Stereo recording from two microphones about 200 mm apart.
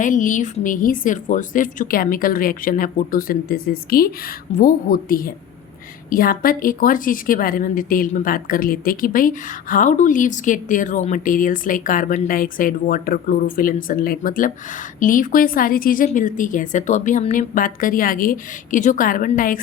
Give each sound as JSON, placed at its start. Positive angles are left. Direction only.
{"t": 0.0, "sound": "a woman's voice", "side_deg": 40}